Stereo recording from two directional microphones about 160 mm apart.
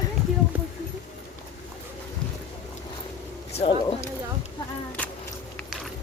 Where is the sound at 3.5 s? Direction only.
35° left (ahead or behind).